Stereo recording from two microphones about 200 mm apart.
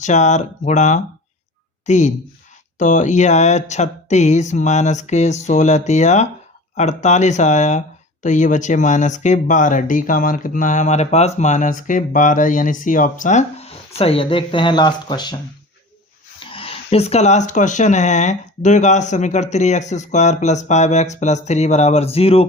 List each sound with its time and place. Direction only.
0.0 s speech: 35° left (ahead or behind)
16.5 s speech: 30° left (ahead or behind)